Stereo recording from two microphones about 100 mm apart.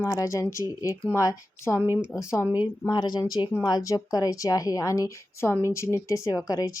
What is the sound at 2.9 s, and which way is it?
A woman's voice, 40° left (ahead or behind).